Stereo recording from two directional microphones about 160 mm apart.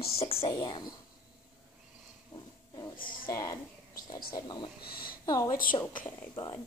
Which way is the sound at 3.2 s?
20° left (ahead or behind).